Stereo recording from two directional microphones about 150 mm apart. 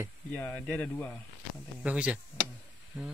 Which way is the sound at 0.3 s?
10° left (ahead or behind).